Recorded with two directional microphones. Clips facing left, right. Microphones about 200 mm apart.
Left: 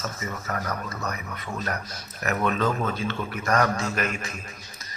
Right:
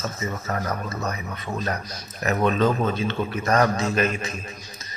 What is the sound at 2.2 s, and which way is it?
A man's voice, 20° right (ahead or behind).